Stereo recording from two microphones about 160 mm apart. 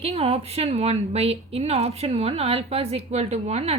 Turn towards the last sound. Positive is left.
turn(degrees=-40)  # may be behind; listen again after turning